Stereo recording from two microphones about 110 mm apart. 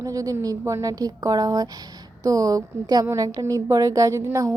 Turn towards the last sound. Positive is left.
turn(degrees=-25)  # may be behind; listen again after turning